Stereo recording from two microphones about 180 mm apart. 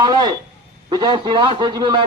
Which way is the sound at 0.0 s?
25° right (ahead or behind).